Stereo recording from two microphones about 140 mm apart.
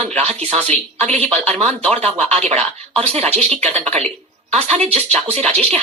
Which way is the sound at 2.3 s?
50° right (ahead or behind).